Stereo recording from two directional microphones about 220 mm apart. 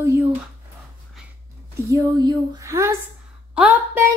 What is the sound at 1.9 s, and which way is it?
A woman's voice, 15° right (ahead or behind).